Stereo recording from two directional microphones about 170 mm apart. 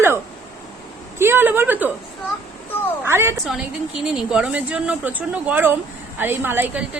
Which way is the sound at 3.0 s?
15° right (ahead or behind).